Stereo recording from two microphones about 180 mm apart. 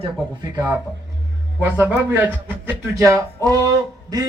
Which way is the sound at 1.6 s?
10° right (ahead or behind).